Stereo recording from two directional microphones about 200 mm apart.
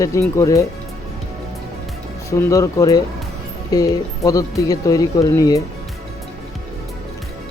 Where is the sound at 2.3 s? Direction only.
15° left (ahead or behind).